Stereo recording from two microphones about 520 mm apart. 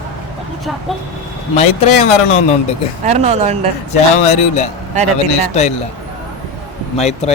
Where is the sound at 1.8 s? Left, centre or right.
Left.